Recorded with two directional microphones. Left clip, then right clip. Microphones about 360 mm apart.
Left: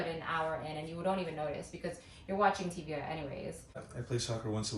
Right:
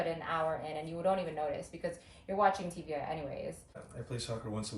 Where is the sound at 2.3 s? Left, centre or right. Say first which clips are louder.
Right 1 dB; centre.